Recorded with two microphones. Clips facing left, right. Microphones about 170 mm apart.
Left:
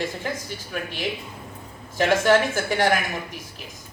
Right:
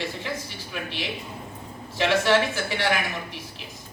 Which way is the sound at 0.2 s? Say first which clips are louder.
Left 2 dB; 45° left (ahead or behind).